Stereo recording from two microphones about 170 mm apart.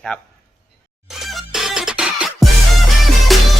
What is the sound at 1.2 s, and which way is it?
Music, centre (ahead or behind).